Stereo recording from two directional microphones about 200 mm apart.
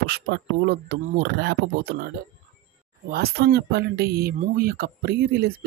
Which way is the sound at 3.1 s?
50° right (ahead or behind).